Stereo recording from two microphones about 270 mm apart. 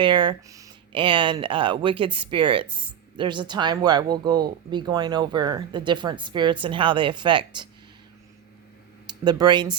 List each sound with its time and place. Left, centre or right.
0.0 s speech: centre
9.0 s speech: centre